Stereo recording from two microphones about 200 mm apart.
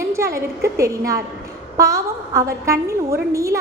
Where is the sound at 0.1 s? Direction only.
15° right (ahead or behind).